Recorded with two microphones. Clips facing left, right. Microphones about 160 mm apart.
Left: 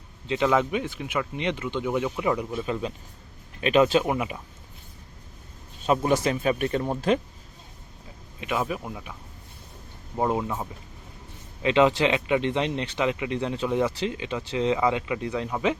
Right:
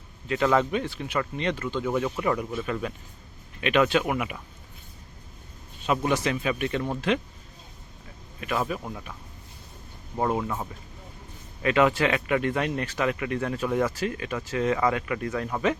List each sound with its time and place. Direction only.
0.4 s speech: 10° left (ahead or behind)
3.6 s speech: 35° left (ahead or behind)
5.8 s speech: 35° left (ahead or behind)
8.4 s speech: 15° left (ahead or behind)
10.2 s speech: 20° left (ahead or behind)